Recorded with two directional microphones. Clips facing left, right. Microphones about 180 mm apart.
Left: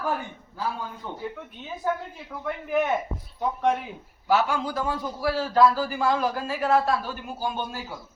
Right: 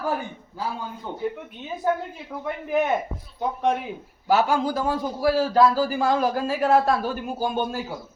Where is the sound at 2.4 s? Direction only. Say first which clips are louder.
Right 1 dB; 20° right (ahead or behind).